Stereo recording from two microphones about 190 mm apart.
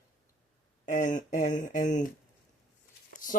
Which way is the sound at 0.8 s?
45° left (ahead or behind).